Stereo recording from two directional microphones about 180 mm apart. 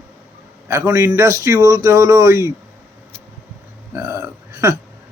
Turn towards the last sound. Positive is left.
turn(degrees=-15)  # may be behind; listen again after turning